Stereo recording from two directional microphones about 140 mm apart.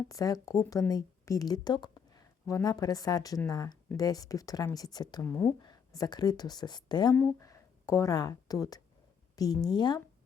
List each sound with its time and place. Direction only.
0.1 s speech: 25° left (ahead or behind)
5.2 s speech: 20° left (ahead or behind)
7.2 s speech: 20° left (ahead or behind)